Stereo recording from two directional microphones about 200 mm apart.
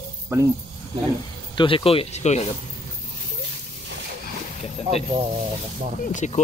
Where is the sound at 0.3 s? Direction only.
15° right (ahead or behind).